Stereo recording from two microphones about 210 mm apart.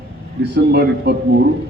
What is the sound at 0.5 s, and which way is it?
Speech, 50° right (ahead or behind).